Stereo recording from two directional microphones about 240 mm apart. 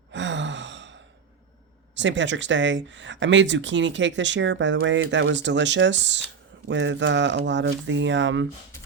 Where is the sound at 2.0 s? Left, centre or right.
Right.